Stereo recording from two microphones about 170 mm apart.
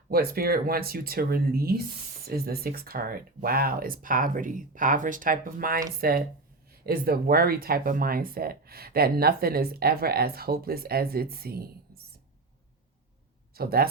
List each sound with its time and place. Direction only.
0.1 s speech: 60° right (ahead or behind)
13.5 s speech: 65° right (ahead or behind)